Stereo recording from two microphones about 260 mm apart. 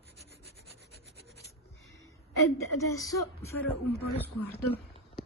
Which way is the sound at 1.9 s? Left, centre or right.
Centre.